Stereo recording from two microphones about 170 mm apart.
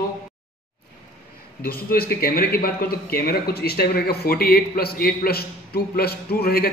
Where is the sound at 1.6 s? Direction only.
60° left (ahead or behind).